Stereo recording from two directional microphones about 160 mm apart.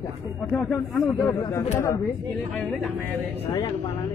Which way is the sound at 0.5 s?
10° left (ahead or behind).